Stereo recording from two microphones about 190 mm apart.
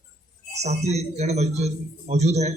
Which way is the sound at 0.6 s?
35° right (ahead or behind).